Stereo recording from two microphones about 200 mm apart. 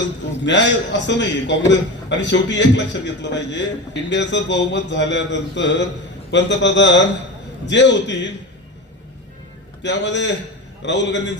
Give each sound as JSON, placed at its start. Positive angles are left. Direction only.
{"t": 0.4, "sound": "a man's voice", "side_deg": 65}
{"t": 9.8, "sound": "a man's voice", "side_deg": 60}